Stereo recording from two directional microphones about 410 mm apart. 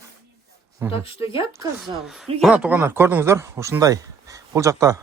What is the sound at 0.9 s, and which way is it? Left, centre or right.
Speech, centre.